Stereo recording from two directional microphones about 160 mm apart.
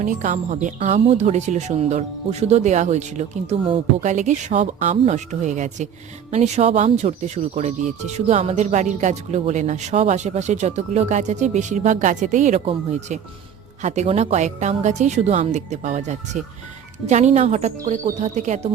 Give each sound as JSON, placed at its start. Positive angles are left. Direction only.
{"t": 0.0, "sound": "speech", "side_deg": -55}